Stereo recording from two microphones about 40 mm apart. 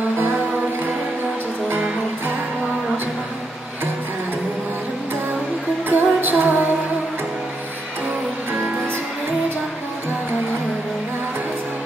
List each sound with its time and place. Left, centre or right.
5.9 s music: right